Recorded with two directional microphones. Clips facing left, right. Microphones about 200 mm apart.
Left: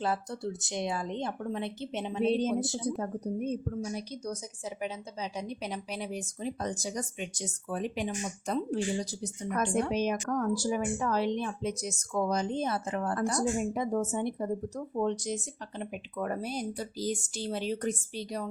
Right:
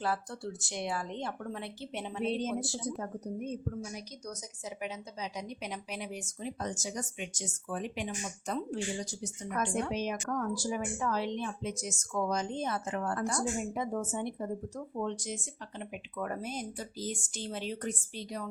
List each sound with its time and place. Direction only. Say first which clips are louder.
0.0 s speech: left 3 dB; 20° left (ahead or behind)
2.2 s speech: left 5 dB; 30° left (ahead or behind)
3.0 s a woman's voice: left 5 dB; 30° left (ahead or behind)